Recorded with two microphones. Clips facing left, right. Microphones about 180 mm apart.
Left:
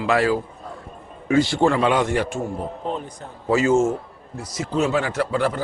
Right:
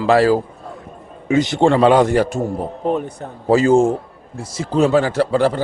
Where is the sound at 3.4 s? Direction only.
35° right (ahead or behind).